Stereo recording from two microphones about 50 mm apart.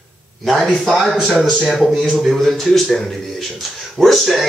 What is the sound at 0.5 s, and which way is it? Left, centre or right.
Speech, centre.